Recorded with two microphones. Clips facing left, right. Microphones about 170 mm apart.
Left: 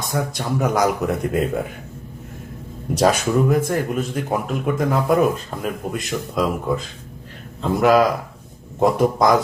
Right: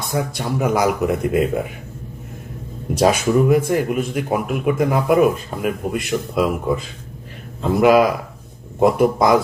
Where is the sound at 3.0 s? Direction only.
10° right (ahead or behind).